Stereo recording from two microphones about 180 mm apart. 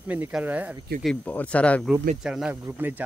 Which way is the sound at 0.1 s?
10° right (ahead or behind).